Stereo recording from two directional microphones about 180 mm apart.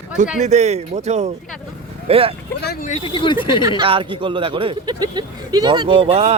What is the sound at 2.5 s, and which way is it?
Speech, 65° left (ahead or behind).